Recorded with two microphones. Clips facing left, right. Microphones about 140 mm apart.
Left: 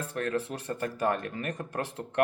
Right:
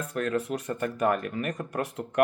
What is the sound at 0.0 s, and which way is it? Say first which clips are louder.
Speech: right 2 dB; 30° left (ahead or behind).